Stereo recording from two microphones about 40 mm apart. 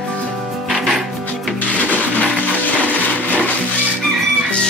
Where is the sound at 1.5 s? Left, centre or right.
Left.